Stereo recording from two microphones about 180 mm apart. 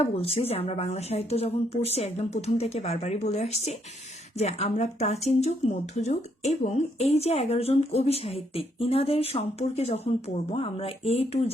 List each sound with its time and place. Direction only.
0.0 s speech: 35° left (ahead or behind)